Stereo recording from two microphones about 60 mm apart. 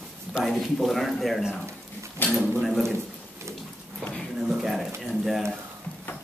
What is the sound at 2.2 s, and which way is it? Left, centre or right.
Speech, left.